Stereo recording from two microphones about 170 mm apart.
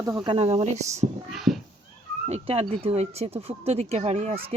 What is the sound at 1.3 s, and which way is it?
Speech, centre (ahead or behind).